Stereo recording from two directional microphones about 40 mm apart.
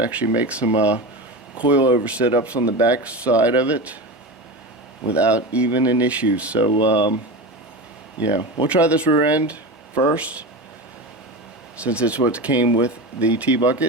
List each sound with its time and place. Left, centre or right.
0.0 s speech: right
5.1 s speech: right
8.6 s speech: right
11.8 s speech: right